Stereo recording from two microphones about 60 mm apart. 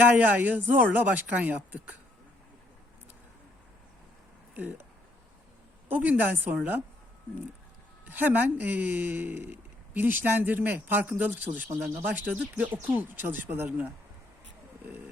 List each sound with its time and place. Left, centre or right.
0.0 s speech: right
5.9 s speech: right
8.1 s speech: right
13.7 s speech: right